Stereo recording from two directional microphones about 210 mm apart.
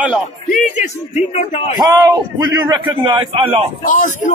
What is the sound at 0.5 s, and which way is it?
Speech, 35° left (ahead or behind).